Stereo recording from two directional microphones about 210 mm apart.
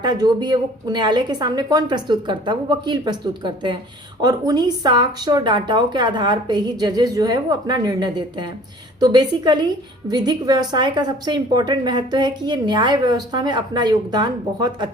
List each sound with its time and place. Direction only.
0.0 s a woman's voice: 20° right (ahead or behind)